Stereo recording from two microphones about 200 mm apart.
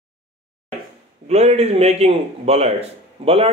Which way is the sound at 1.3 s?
30° right (ahead or behind).